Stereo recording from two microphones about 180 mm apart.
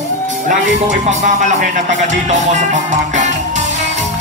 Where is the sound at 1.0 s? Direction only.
40° right (ahead or behind).